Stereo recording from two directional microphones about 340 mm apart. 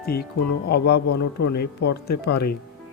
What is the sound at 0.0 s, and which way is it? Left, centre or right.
Speech, left.